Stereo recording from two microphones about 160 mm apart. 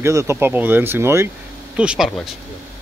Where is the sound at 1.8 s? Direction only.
5° right (ahead or behind).